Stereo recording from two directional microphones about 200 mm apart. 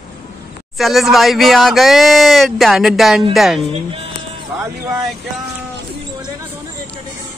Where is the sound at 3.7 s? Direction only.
30° right (ahead or behind).